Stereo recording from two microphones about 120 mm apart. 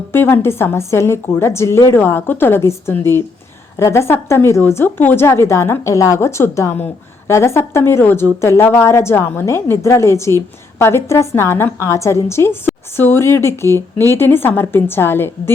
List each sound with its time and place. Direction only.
0.1 s a woman's voice: 20° left (ahead or behind)